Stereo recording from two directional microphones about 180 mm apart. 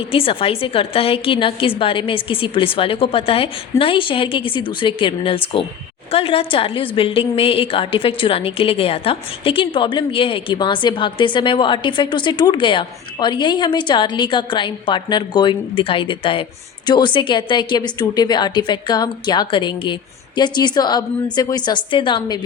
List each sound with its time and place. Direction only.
0.1 s a woman's voice: 30° left (ahead or behind)